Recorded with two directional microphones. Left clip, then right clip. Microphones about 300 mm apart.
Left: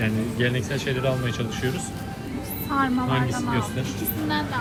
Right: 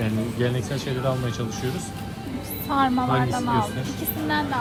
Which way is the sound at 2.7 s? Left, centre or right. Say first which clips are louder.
Right 2 dB; right.